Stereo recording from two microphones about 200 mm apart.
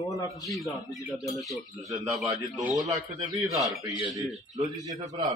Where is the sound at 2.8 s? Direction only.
20° right (ahead or behind).